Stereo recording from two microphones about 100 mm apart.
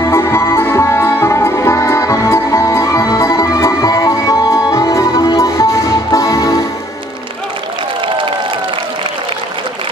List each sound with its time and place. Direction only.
0.0 s music: 25° left (ahead or behind)